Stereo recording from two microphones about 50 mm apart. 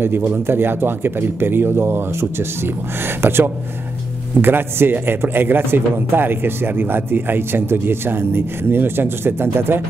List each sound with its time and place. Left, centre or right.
0.0 s speech: right